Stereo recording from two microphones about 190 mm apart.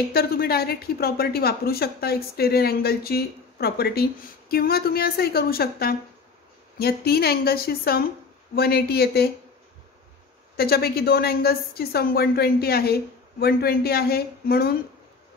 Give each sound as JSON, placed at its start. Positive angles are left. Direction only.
{"t": 0.1, "sound": "speech", "side_deg": 55}
{"t": 10.5, "sound": "speech", "side_deg": 55}